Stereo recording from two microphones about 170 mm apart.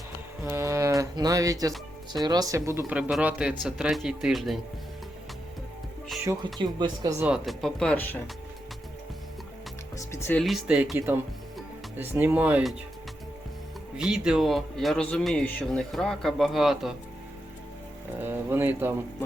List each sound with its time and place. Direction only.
0.4 s speech: 15° right (ahead or behind)
6.2 s speech: 25° right (ahead or behind)
7.3 s speech: centre (ahead or behind)
10.0 s speech: 15° left (ahead or behind)
10.4 s speech: 5° right (ahead or behind)
13.9 s speech: 5° right (ahead or behind)
18.2 s speech: 15° right (ahead or behind)